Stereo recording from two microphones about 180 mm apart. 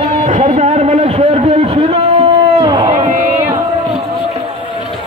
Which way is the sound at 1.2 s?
35° right (ahead or behind).